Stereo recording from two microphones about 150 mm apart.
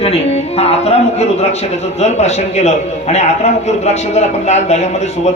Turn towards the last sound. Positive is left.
turn(degrees=45)  # may be behind; listen again after turning